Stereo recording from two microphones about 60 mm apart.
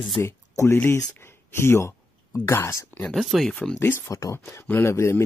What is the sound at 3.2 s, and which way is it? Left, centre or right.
Speech, centre.